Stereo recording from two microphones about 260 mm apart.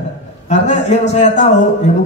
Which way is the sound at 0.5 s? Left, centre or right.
Left.